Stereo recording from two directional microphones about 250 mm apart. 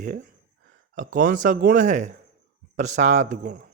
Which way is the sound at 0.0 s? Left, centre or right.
Right.